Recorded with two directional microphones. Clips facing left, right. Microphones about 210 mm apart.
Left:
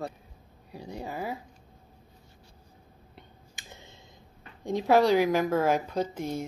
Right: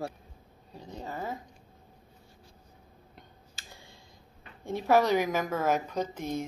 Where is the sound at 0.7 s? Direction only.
10° left (ahead or behind).